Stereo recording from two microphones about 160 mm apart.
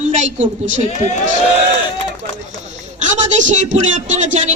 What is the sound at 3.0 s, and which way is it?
Speech, 50° right (ahead or behind).